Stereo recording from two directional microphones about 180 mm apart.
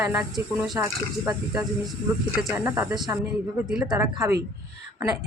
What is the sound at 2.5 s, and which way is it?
Speech, 10° right (ahead or behind).